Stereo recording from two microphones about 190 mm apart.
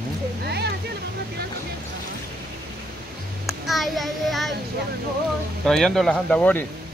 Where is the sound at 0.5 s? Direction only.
60° right (ahead or behind).